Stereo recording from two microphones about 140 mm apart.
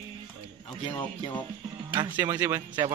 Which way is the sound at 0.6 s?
35° left (ahead or behind).